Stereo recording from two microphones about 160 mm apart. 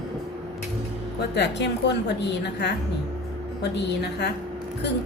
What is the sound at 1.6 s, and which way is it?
A woman's voice, 90° left.